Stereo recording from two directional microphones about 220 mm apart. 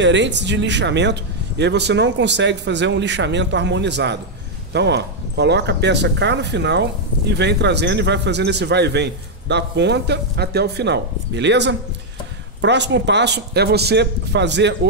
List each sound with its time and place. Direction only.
0.0 s speech: 55° right (ahead or behind)